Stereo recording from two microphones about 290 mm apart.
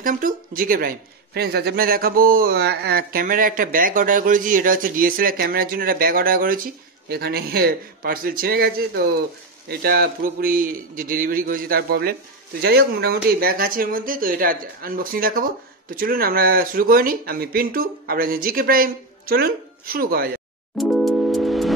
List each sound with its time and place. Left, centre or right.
0.0 s speech: right
20.7 s music: centre